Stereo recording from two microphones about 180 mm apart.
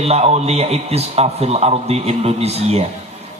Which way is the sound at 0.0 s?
35° right (ahead or behind).